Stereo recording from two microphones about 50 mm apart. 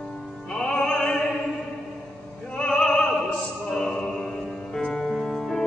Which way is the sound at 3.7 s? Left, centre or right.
Centre.